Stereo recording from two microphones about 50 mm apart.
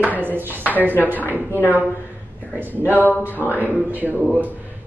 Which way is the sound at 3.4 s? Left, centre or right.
Left.